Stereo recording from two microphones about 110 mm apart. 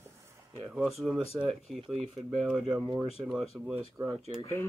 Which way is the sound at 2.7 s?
40° right (ahead or behind).